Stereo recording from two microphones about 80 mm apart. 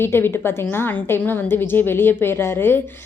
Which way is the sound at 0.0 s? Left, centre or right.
Left.